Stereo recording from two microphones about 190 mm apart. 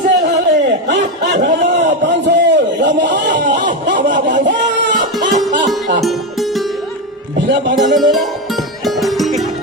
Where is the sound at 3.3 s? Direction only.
45° right (ahead or behind).